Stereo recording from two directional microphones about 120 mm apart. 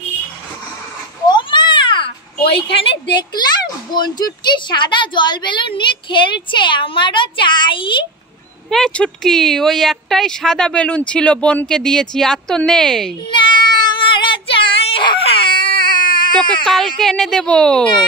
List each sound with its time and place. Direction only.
1.2 s cat: 40° left (ahead or behind)
2.4 s a woman's voice: 50° left (ahead or behind)
8.6 s speech: 5° left (ahead or behind)
13.3 s child singing: 40° left (ahead or behind)
16.6 s speech: 5° left (ahead or behind)